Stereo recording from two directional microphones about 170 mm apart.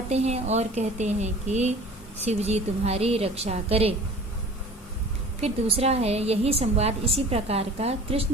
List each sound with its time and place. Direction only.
0.1 s a woman's voice: 40° right (ahead or behind)
5.4 s a woman's voice: 35° right (ahead or behind)